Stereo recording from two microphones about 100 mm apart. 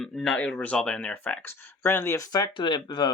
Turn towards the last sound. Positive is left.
turn(degrees=50)  # may be behind; listen again after turning